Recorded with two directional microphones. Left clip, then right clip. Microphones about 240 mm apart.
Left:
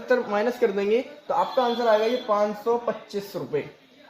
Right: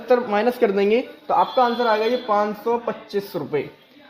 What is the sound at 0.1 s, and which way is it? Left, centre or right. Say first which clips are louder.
Speech: right 4 dB; right.